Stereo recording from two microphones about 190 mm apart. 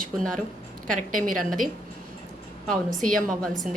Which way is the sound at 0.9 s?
45° right (ahead or behind).